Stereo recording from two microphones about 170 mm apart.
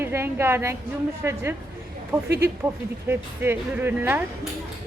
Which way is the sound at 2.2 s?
75° right (ahead or behind).